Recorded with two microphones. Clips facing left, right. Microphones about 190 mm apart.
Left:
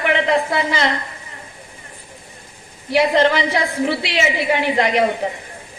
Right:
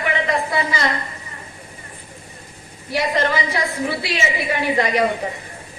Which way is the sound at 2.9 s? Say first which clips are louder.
Left 5 dB; 70° left (ahead or behind).